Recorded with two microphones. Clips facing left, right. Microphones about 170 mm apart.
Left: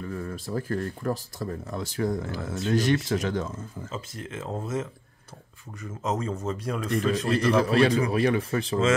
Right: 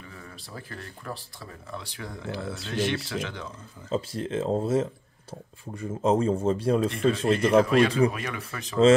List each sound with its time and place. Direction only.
0.0 s speech: 45° left (ahead or behind)
3.9 s a man's voice: 30° right (ahead or behind)
7.5 s speech: 30° left (ahead or behind)